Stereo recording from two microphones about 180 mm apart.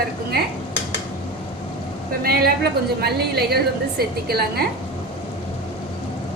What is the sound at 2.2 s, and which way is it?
A woman's voice, 60° right (ahead or behind).